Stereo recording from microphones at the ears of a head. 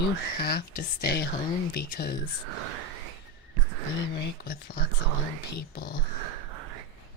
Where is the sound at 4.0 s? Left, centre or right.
Left.